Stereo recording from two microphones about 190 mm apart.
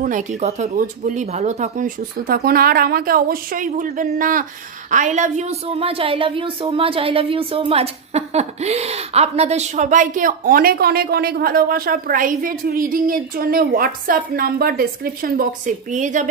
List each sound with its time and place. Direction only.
0.4 s a woman's voice: 35° right (ahead or behind)